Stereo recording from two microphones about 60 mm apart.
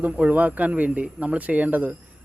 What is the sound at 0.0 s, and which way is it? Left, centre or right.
A man's voice, right.